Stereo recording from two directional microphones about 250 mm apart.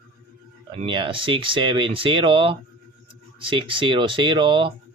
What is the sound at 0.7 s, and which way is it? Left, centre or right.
Speech, centre.